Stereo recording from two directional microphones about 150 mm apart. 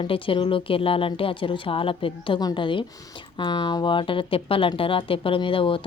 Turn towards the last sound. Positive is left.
turn(degrees=35)  # may be behind; listen again after turning